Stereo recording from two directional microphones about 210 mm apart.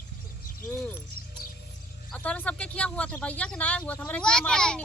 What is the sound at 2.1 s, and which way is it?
Speech, 5° left (ahead or behind).